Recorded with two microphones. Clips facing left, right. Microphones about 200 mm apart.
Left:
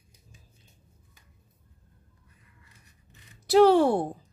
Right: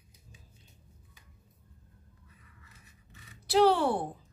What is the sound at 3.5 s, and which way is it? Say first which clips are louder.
Speech: left 6 dB; 45° left (ahead or behind).